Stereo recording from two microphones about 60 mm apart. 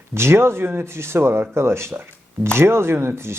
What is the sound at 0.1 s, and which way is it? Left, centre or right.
Speech, right.